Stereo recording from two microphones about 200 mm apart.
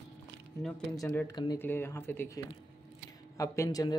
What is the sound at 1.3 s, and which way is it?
A man's voice, 20° left (ahead or behind).